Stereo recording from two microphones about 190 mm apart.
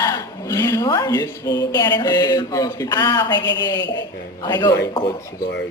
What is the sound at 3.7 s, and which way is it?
Speech, 70° left (ahead or behind).